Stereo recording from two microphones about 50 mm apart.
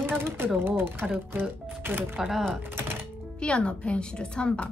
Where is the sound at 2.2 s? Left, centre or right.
Centre.